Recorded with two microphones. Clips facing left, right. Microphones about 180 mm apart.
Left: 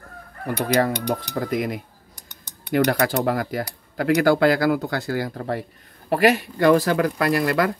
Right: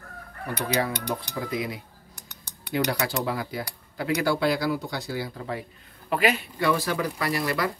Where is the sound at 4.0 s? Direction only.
85° left.